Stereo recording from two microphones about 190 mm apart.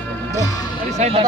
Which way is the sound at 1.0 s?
30° right (ahead or behind).